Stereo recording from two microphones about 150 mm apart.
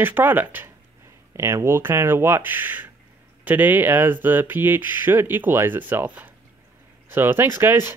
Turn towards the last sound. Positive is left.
turn(degrees=-15)  # may be behind; listen again after turning